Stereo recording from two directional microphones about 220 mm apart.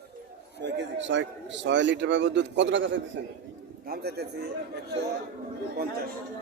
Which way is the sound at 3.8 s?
45° right (ahead or behind).